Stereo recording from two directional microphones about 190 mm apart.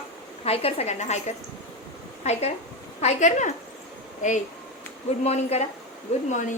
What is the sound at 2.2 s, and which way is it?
A woman's voice, 35° left (ahead or behind).